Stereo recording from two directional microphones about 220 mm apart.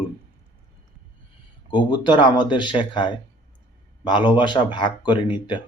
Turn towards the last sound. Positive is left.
turn(degrees=20)  # may be behind; listen again after turning